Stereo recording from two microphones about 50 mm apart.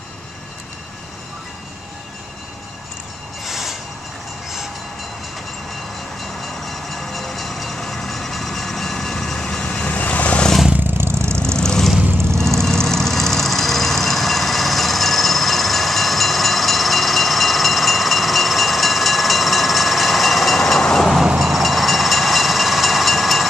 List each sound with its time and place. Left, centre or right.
3.4 s train: centre
6.4 s vehicle: centre; by 10.5 s left
10.8 s vehicle: right
11.5 s vehicle: centre
21.4 s train: centre